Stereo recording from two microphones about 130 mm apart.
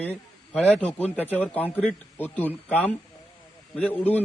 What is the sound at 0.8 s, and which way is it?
A man's voice, 10° left (ahead or behind).